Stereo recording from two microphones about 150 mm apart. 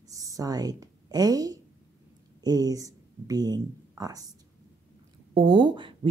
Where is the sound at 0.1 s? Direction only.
25° right (ahead or behind).